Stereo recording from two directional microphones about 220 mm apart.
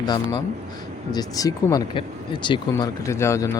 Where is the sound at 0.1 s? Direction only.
20° left (ahead or behind).